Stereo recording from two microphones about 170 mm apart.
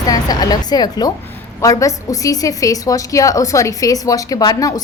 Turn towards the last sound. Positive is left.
turn(degrees=20)  # may be behind; listen again after turning